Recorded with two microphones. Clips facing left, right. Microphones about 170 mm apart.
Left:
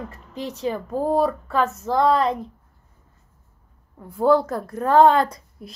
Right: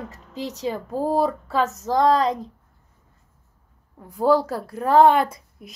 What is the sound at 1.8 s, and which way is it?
Speech, 20° right (ahead or behind).